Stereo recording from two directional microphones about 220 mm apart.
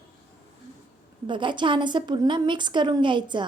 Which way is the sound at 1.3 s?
20° right (ahead or behind).